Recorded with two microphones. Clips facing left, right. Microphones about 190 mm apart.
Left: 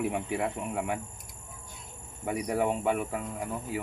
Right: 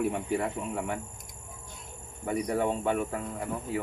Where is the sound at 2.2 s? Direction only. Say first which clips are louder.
Even; 10° left (ahead or behind).